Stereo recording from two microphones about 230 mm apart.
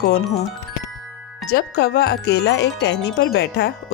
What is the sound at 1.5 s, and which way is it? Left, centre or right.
Wind chime, left.